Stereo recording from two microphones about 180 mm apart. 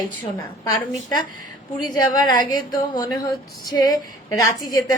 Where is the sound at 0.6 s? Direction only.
20° left (ahead or behind).